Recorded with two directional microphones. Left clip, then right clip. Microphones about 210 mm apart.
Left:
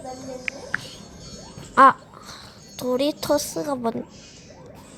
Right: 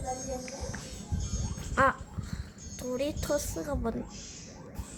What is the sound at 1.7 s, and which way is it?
Speech, 20° left (ahead or behind).